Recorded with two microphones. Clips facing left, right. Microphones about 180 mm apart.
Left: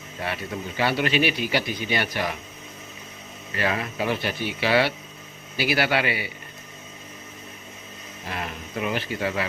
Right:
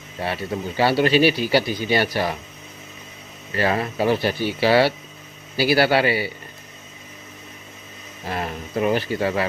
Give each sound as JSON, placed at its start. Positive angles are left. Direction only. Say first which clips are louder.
{"t": 0.2, "sound": "a man's voice", "louder": "right 5 dB", "side_deg": -30}
{"t": 3.5, "sound": "a man's voice", "louder": "right 5 dB", "side_deg": -35}
{"t": 8.3, "sound": "a man's voice", "louder": "right 6 dB", "side_deg": -40}